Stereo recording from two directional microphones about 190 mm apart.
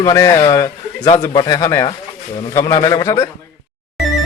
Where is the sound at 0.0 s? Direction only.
20° left (ahead or behind).